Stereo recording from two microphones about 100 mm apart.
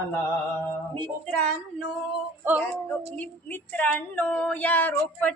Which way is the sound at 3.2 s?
20° left (ahead or behind).